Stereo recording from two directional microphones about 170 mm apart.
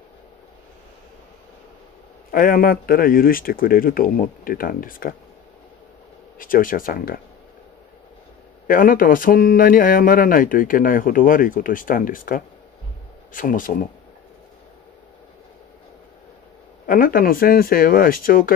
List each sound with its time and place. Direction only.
2.3 s speech: 55° left (ahead or behind)
6.3 s speech: 55° left (ahead or behind)
8.6 s speech: 55° left (ahead or behind)
16.8 s speech: 55° left (ahead or behind)